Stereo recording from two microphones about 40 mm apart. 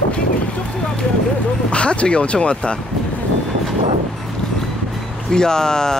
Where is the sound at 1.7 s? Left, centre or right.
Left.